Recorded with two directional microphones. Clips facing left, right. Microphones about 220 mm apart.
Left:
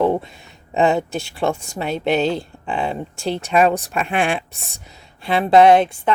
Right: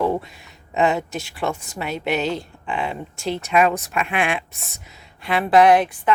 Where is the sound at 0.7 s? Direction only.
30° left (ahead or behind).